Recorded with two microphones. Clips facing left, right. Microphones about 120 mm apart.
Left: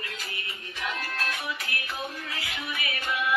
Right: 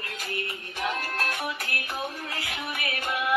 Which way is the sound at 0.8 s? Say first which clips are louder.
Right 3 dB; 50° right (ahead or behind).